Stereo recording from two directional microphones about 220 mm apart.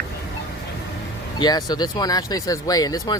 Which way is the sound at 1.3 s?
20° left (ahead or behind).